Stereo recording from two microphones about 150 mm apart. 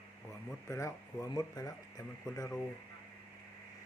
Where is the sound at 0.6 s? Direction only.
20° left (ahead or behind).